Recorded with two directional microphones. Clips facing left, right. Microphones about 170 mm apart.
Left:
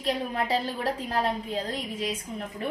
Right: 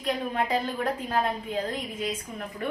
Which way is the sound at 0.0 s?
35° left (ahead or behind).